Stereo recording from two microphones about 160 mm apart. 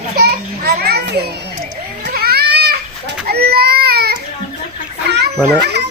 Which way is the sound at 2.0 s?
75° right (ahead or behind).